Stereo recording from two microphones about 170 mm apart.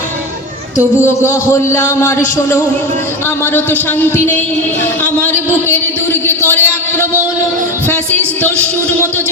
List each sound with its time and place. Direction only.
1.0 s a man's voice: 15° left (ahead or behind)
6.2 s a sound: 15° left (ahead or behind)
8.4 s a man's voice: 10° left (ahead or behind)